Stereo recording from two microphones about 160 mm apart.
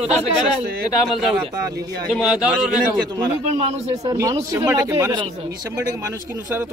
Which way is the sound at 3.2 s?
35° right (ahead or behind).